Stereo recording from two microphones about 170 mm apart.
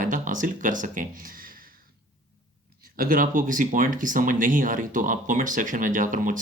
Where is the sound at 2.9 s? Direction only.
55° right (ahead or behind).